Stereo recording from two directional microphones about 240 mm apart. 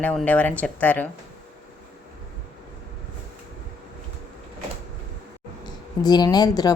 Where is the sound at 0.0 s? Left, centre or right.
Centre.